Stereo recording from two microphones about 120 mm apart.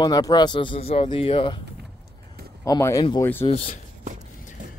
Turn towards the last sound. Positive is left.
turn(degrees=60)  # may be behind; listen again after turning